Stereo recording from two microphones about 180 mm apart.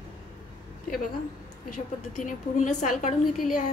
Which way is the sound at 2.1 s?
45° left (ahead or behind).